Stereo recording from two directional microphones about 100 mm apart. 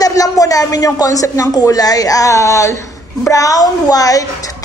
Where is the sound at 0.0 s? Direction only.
35° left (ahead or behind).